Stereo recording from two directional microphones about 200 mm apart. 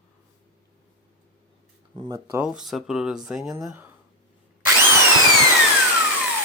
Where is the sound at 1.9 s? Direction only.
25° right (ahead or behind).